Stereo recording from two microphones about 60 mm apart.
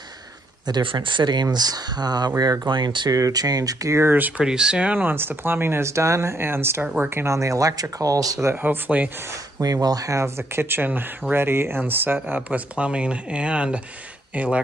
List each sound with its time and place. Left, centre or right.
1.2 s speech: right
1.6 s speech: right
4.1 s speech: right
4.5 s speech: centre
5.0 s speech: right
7.3 s speech: right
8.5 s speech: right
9.6 s speech: right
10.2 s speech: right